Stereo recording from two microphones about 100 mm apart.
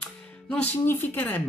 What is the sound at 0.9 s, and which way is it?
Speech, 20° left (ahead or behind).